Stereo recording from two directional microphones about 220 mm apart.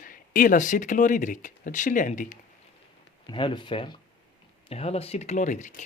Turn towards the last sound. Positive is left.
turn(degrees=35)  # may be behind; listen again after turning